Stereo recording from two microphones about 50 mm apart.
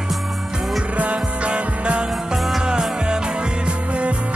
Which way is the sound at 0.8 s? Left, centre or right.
Right.